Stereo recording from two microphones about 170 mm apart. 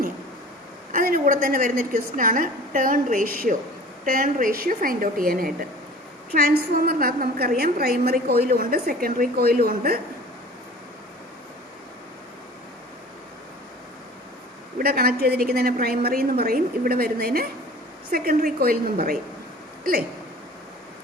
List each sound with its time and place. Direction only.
0.9 s a woman's voice: 55° right (ahead or behind)
6.3 s a woman's voice: 65° right (ahead or behind)
14.8 s a woman's voice: 60° right (ahead or behind)